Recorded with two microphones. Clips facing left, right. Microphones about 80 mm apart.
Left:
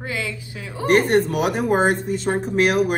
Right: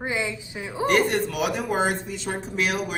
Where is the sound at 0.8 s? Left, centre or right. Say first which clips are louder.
Left 5 dB; left.